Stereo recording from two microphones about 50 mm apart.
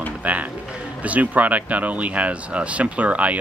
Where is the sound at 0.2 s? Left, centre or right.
Right.